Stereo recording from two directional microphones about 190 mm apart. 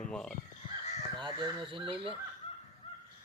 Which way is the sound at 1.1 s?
25° right (ahead or behind).